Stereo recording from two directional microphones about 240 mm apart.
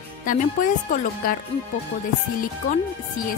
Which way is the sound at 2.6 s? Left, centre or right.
Left.